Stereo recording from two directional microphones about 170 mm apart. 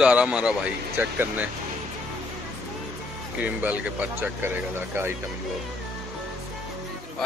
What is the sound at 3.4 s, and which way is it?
Speech, 10° right (ahead or behind).